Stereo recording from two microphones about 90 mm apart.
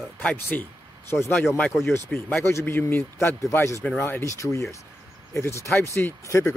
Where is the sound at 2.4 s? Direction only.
30° left (ahead or behind).